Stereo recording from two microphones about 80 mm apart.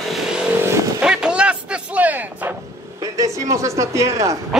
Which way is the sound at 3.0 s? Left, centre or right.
Right.